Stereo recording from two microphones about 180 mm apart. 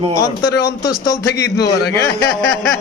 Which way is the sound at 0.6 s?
20° left (ahead or behind).